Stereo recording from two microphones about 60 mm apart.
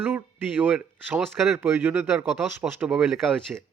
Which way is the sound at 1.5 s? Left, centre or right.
Right.